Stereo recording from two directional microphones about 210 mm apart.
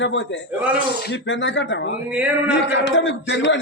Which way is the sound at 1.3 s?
60° left (ahead or behind).